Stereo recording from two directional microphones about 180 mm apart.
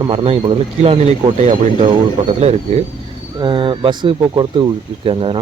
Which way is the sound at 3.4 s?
25° right (ahead or behind).